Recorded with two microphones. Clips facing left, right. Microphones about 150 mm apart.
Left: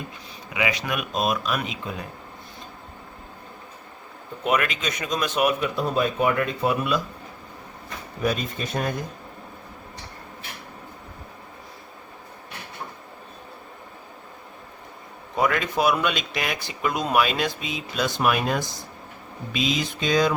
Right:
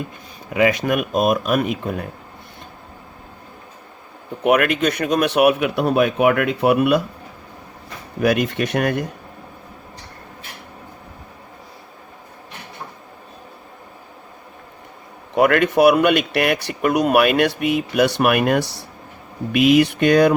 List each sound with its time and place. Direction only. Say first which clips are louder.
0.5 s speech: right 9 dB; 50° right (ahead or behind)
4.4 s speech: right 8 dB; 60° right (ahead or behind)
8.2 s speech: right 8 dB; 75° right (ahead or behind)
15.4 s speech: right 8 dB; 65° right (ahead or behind)